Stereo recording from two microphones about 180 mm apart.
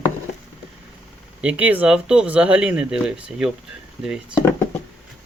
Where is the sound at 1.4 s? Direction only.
10° right (ahead or behind).